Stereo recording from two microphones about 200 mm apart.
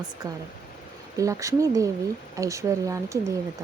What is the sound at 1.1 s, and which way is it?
Speech, 15° right (ahead or behind).